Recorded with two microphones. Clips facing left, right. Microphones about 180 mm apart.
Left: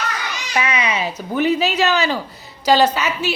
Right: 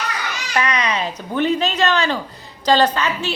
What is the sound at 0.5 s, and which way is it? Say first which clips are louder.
Speech: even; 5° left (ahead or behind).